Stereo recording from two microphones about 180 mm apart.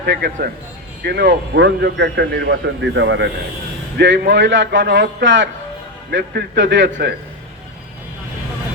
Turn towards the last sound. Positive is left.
turn(degrees=-80)